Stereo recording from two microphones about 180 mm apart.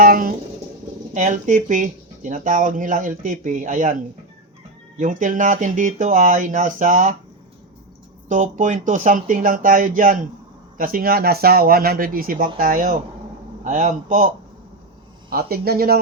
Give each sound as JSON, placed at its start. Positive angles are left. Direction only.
{"t": 0.0, "sound": "a sound", "side_deg": -50}
{"t": 1.1, "sound": "speech", "side_deg": -40}
{"t": 4.9, "sound": "speech", "side_deg": -45}
{"t": 8.3, "sound": "speech", "side_deg": -45}
{"t": 15.3, "sound": "speech", "side_deg": -55}